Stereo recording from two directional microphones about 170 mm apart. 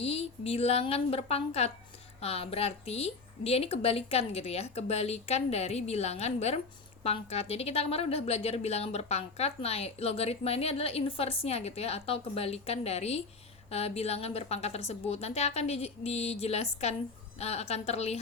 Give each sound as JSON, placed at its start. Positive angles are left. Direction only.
{"t": 0.0, "sound": "a woman's voice", "side_deg": 35}